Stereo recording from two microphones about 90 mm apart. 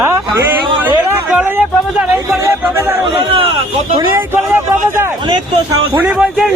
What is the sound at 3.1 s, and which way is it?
Speech, 90° right.